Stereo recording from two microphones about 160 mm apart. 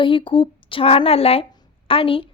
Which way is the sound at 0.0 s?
30° left (ahead or behind).